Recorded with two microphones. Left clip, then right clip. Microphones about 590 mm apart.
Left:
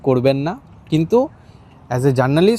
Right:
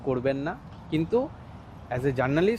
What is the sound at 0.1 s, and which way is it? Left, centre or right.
Speech, left.